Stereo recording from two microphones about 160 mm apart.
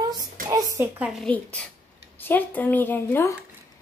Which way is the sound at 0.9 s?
5° right (ahead or behind).